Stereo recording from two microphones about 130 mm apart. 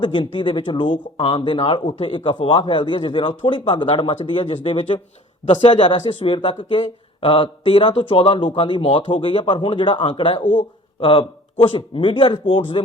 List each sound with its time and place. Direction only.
0.0 s speech: 40° left (ahead or behind)
10.4 s speech: 90° left
11.0 s speech: 40° left (ahead or behind)